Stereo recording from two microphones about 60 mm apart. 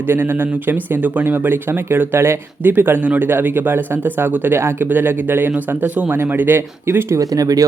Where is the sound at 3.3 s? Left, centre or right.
Right.